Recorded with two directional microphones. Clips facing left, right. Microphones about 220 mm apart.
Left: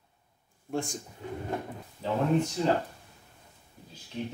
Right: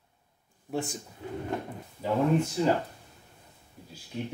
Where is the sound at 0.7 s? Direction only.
5° right (ahead or behind).